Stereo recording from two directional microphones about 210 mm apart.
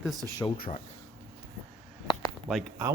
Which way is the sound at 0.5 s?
45° left (ahead or behind).